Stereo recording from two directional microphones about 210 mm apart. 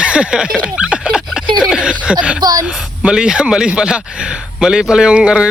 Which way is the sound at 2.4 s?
20° right (ahead or behind).